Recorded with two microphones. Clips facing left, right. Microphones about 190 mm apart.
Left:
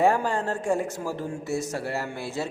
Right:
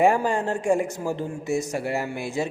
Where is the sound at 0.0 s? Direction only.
15° right (ahead or behind).